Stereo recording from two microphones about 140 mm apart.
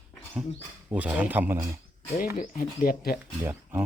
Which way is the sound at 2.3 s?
75° left (ahead or behind).